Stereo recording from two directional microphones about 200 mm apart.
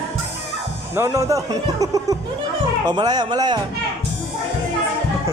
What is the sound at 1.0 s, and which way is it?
Speech, 15° right (ahead or behind).